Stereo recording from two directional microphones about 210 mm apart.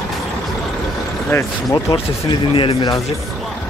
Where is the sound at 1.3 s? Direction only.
15° left (ahead or behind).